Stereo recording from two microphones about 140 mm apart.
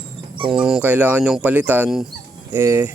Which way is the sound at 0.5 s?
5° right (ahead or behind).